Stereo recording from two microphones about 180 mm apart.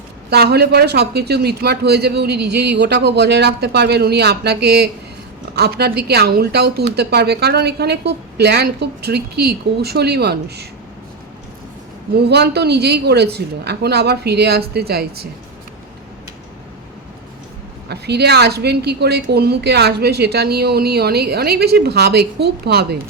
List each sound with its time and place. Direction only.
0.3 s a woman's voice: 65° right (ahead or behind)
12.1 s a woman's voice: 65° right (ahead or behind)
17.8 s a woman's voice: 65° right (ahead or behind)